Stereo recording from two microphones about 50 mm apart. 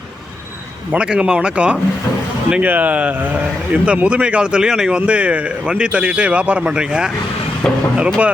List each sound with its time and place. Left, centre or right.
0.9 s a man's voice: centre
2.6 s speech: right
3.7 s a man's voice: right